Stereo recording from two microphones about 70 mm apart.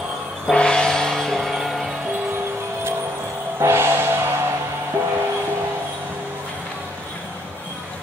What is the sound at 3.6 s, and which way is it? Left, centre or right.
Music, right.